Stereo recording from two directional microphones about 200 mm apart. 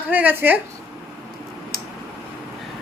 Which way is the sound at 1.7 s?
50° right (ahead or behind).